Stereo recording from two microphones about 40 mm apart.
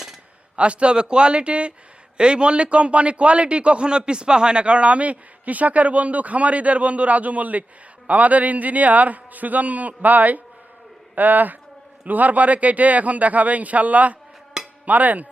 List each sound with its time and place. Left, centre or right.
0.5 s a man's voice: right